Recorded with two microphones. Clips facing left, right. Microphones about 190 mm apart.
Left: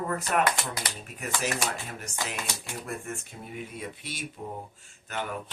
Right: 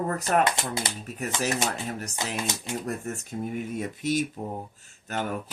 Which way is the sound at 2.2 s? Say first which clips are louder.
Right 1 dB; 20° right (ahead or behind).